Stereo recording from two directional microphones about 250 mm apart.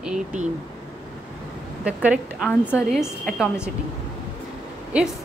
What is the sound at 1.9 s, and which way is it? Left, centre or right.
A woman's voice, centre.